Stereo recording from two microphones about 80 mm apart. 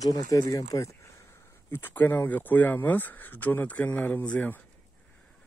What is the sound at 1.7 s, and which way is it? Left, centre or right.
Speech, left.